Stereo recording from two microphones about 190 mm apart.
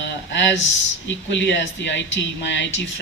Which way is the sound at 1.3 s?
70° left (ahead or behind).